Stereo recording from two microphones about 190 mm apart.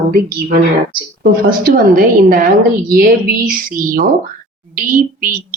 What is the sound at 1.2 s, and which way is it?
Speech, 50° right (ahead or behind).